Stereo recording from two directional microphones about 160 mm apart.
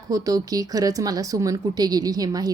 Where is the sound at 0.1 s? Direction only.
25° right (ahead or behind).